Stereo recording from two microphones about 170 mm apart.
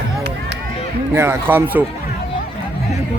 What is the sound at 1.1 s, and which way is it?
Speech, 15° right (ahead or behind).